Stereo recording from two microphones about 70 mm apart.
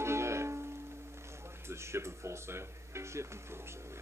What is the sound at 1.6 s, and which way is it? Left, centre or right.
Music, right.